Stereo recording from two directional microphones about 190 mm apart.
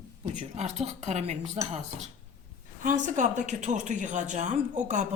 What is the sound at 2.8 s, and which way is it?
A woman's voice, 40° right (ahead or behind).